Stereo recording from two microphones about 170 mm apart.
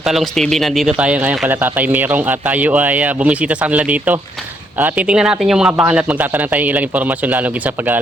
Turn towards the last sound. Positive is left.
turn(degrees=-10)  # may be behind; listen again after turning